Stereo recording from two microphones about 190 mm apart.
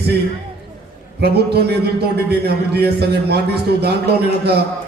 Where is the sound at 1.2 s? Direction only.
60° right (ahead or behind).